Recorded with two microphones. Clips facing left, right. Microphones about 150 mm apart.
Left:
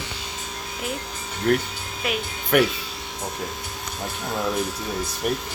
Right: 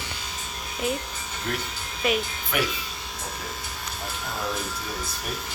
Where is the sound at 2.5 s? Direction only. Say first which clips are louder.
Left 9 dB; 55° left (ahead or behind).